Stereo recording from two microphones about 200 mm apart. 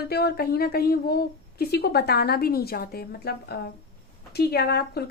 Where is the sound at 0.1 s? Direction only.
50° left (ahead or behind).